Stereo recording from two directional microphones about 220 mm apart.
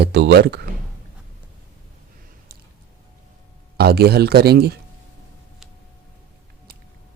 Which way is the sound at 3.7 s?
45° right (ahead or behind).